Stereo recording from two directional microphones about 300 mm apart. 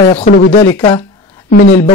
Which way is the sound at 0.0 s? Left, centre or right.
Left.